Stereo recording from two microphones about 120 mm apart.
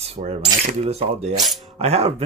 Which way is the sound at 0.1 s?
75° right (ahead or behind).